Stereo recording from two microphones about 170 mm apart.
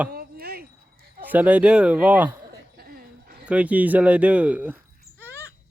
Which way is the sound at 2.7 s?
65° right (ahead or behind).